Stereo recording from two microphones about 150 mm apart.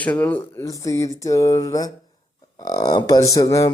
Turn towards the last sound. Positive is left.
turn(degrees=20)  # may be behind; listen again after turning